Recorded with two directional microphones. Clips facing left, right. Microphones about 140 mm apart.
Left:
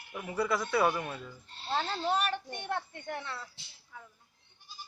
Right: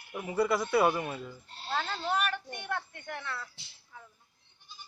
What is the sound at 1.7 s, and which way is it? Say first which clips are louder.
Speech: left 1 dB; 25° left (ahead or behind).